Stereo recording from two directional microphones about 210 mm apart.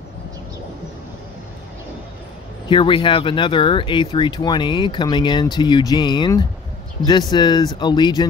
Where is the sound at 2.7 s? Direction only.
25° left (ahead or behind).